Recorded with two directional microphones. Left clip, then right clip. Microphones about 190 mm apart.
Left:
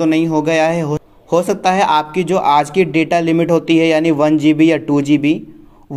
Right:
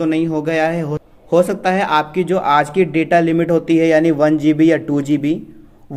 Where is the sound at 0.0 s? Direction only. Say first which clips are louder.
Left 3 dB; 20° left (ahead or behind).